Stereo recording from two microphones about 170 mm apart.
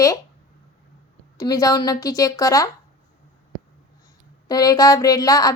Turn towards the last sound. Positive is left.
turn(degrees=20)  # may be behind; listen again after turning